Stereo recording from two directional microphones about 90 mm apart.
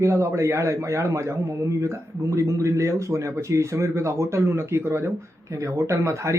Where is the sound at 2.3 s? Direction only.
35° right (ahead or behind).